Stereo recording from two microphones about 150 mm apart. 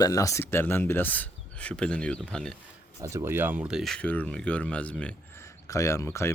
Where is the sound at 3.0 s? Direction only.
20° right (ahead or behind); by 5.5 s 10° left (ahead or behind).